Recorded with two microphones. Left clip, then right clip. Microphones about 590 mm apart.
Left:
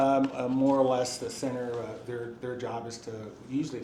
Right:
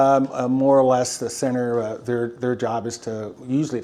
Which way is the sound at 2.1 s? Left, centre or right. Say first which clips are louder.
Right 14 dB; right.